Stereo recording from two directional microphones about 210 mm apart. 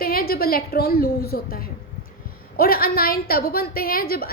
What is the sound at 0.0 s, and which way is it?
A woman's voice, 45° left (ahead or behind).